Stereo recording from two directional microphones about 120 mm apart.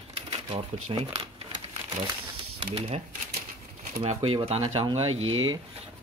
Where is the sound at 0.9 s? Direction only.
40° right (ahead or behind).